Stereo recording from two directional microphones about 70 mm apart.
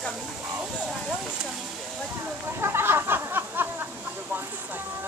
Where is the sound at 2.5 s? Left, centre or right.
Right.